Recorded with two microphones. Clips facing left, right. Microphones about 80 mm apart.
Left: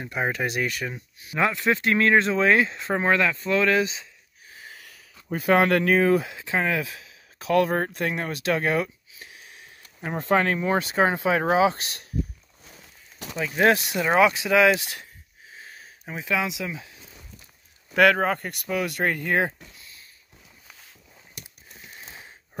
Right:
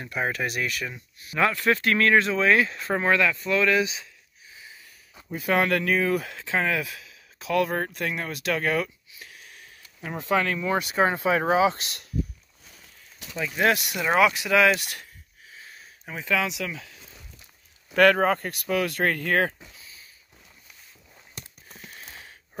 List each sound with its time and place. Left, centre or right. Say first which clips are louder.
0.0 s speech: left 1 dB; centre; by 3.9 s left
4.6 s a sound: left 4 dB; left
5.3 s speech: left 4 dB; left
6.2 s speech: left 1 dB; centre
6.6 s speech: left 2 dB; left
7.3 s speech: left 3 dB; left
13.6 s speech: left 3 dB; left
14.0 s speech: left 1 dB; left
15.5 s a sound: left 2 dB; left
16.2 s speech: even; centre
17.9 s speech: even; centre
19.6 s a sound: even; centre
21.9 s a sound: left 2 dB; centre